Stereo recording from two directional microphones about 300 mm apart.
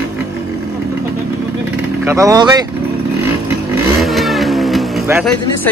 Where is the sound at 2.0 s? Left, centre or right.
Centre.